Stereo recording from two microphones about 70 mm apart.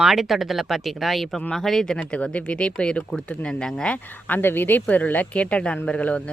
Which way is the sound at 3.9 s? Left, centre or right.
Left.